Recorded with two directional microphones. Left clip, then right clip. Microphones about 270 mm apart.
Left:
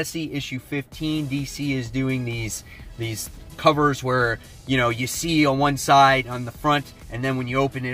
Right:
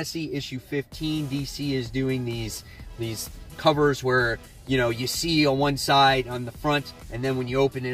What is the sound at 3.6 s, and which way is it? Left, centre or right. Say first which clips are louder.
Speech: left 2 dB; centre.